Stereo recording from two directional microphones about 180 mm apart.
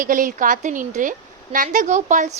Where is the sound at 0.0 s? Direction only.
50° right (ahead or behind).